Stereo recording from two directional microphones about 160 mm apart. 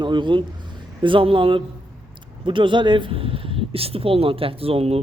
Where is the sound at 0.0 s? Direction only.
30° right (ahead or behind).